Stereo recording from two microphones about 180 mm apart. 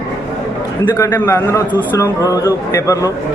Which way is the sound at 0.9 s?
15° left (ahead or behind).